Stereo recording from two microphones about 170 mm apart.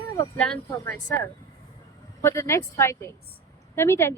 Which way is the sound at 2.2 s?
15° left (ahead or behind).